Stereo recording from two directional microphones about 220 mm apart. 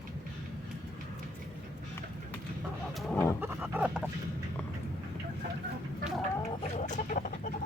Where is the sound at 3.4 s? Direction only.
5° right (ahead or behind).